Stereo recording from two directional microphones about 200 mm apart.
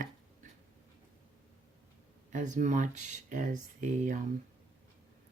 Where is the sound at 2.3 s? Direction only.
40° right (ahead or behind).